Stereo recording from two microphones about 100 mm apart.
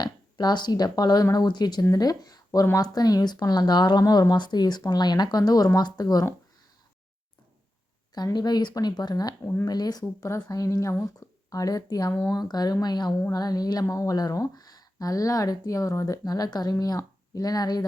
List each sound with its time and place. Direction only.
0.0 s speech: 45° left (ahead or behind)
8.1 s a woman's voice: 45° left (ahead or behind)
11.2 s a sound: 30° left (ahead or behind)
11.5 s a woman's voice: 35° left (ahead or behind)